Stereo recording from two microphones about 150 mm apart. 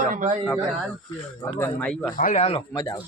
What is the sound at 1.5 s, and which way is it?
Speech, 15° left (ahead or behind).